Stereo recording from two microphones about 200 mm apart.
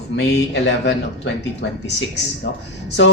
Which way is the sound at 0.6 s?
60° left (ahead or behind).